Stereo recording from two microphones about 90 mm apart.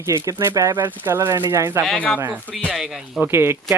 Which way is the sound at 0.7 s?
25° right (ahead or behind).